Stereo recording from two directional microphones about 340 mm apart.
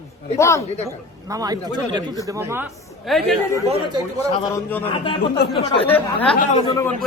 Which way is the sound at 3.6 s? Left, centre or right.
Centre.